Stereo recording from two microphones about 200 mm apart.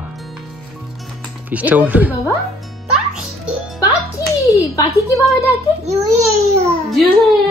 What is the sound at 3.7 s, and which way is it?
Music, 15° left (ahead or behind).